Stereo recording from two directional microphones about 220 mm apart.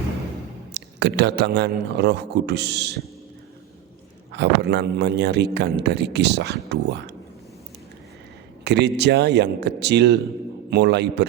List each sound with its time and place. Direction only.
0.7 s a man's voice: 50° right (ahead or behind)
4.3 s a man's voice: 50° right (ahead or behind)
8.6 s a man's voice: 50° right (ahead or behind)